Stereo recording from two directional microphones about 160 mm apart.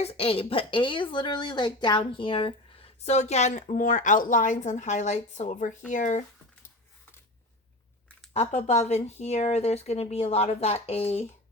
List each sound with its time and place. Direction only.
0.0 s a woman's voice: 35° left (ahead or behind)
8.3 s a woman's voice: 45° left (ahead or behind)